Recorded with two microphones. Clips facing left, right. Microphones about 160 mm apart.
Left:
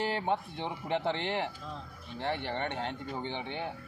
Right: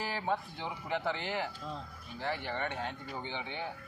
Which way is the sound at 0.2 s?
25° left (ahead or behind).